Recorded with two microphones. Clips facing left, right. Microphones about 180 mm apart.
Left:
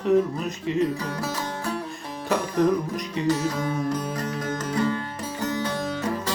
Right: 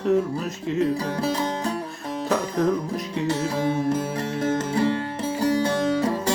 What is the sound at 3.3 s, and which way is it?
Music, 30° right (ahead or behind).